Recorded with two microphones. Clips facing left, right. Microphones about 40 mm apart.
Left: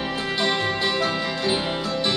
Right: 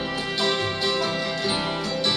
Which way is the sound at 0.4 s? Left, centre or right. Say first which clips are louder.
Left 2 dB; centre.